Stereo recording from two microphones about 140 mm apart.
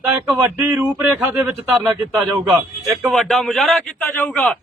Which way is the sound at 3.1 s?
5° left (ahead or behind).